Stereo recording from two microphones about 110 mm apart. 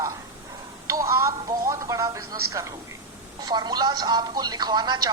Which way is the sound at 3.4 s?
40° right (ahead or behind).